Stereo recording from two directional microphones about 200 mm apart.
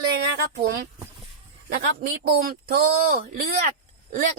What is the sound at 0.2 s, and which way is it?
Speech, 55° right (ahead or behind).